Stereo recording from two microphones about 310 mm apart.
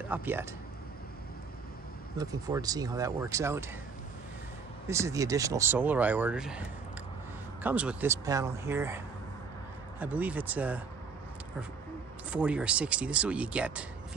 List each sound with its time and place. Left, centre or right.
0.1 s speech: centre
2.1 s speech: centre
4.8 s speech: centre
7.6 s speech: centre
12.3 s speech: centre